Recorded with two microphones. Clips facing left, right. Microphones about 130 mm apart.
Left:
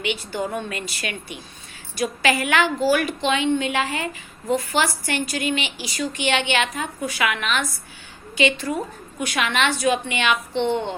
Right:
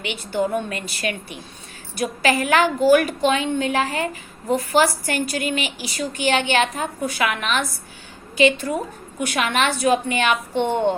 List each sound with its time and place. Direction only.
0.7 s a woman's voice: 40° right (ahead or behind)